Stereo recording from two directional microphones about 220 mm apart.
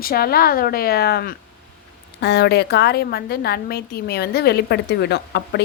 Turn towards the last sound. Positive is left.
turn(degrees=50)  # may be behind; listen again after turning